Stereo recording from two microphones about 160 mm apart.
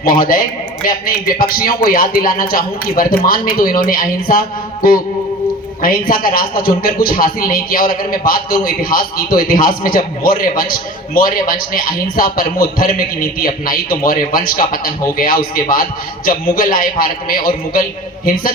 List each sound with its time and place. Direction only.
0.0 s a man's voice: 60° left (ahead or behind)